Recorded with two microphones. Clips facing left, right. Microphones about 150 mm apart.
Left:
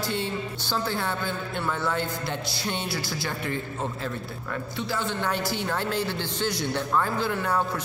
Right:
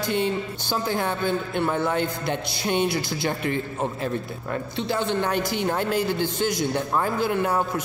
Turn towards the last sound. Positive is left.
turn(degrees=-15)  # may be behind; listen again after turning